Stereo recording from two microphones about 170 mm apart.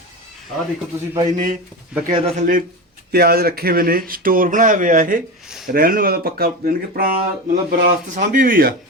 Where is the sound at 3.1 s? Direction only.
65° right (ahead or behind).